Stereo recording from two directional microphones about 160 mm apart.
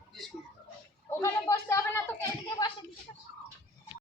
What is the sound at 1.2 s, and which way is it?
Speech, 15° left (ahead or behind).